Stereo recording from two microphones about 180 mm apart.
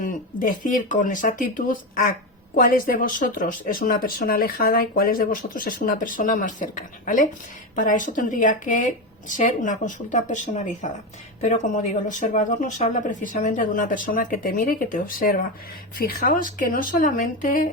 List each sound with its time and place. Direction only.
0.0 s speech: 50° left (ahead or behind)